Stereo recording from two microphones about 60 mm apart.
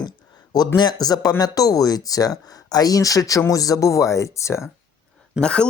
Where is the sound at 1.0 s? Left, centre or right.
Left.